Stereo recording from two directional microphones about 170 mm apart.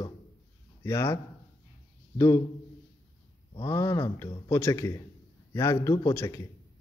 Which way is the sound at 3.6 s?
20° left (ahead or behind).